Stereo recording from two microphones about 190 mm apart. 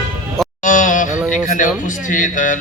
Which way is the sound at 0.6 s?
45° left (ahead or behind).